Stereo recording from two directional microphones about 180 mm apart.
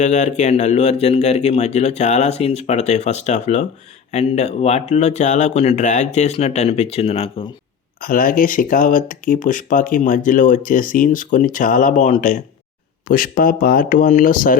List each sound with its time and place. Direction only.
0.0 s speech: 40° left (ahead or behind)
8.0 s speech: 50° left (ahead or behind)